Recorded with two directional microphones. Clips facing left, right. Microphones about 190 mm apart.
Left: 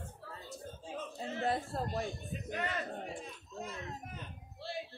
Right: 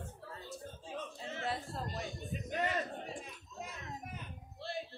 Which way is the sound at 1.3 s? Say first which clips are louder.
Left 5 dB; 40° left (ahead or behind).